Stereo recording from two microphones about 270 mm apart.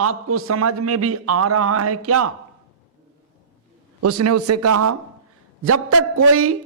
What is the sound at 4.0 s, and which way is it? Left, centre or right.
A man's voice, right.